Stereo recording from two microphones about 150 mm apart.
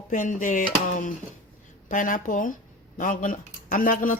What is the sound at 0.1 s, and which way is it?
Speech, 55° left (ahead or behind).